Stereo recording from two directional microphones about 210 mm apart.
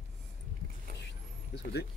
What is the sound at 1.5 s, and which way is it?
Speech, 55° left (ahead or behind).